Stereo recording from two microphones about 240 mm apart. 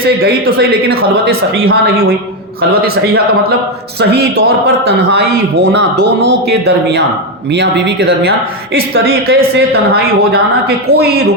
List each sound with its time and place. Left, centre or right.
0.0 s speech: right
4.1 s speech: right
6.5 s speech: right